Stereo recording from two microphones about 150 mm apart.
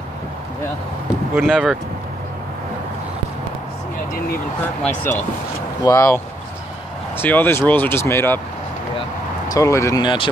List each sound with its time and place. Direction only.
1.3 s speech: centre (ahead or behind)
5.9 s speech: 20° left (ahead or behind)
9.5 s speech: 20° left (ahead or behind)
10.0 s speech: 35° left (ahead or behind)